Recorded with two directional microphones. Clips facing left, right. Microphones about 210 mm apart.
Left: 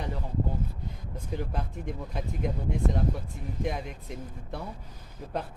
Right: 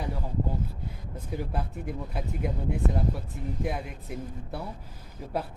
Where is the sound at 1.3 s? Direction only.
5° right (ahead or behind).